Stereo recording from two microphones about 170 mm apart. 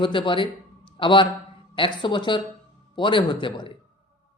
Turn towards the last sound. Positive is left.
turn(degrees=30)  # may be behind; listen again after turning